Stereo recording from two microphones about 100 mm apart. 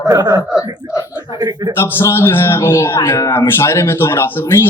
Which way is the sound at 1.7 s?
25° left (ahead or behind).